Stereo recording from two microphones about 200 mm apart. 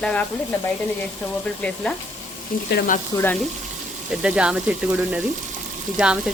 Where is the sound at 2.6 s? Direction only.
50° left (ahead or behind).